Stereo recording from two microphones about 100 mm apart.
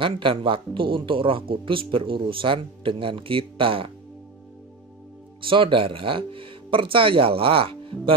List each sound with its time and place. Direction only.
0.0 s speech: 60° right (ahead or behind)
5.4 s speech: 60° right (ahead or behind)